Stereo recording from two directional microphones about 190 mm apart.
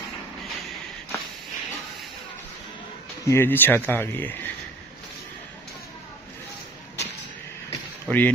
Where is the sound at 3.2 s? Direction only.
10° left (ahead or behind).